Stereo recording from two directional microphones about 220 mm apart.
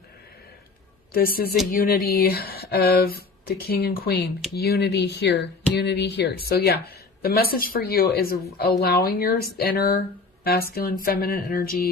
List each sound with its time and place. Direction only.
1.1 s speech: 45° left (ahead or behind)